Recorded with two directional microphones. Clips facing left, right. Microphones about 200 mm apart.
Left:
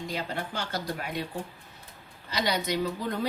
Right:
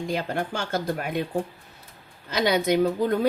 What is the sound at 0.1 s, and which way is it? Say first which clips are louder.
A woman's voice: right 7 dB; 50° right (ahead or behind).